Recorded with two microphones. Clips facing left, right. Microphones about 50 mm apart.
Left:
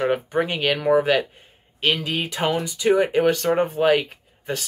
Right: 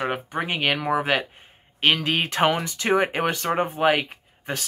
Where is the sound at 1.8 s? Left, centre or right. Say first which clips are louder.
Right 1 dB; right.